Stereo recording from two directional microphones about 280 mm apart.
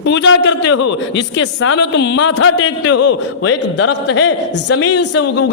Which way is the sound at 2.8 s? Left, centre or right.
Left.